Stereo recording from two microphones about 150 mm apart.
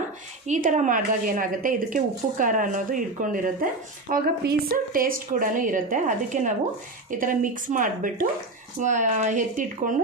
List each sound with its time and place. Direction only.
0.4 s speech: 55° right (ahead or behind)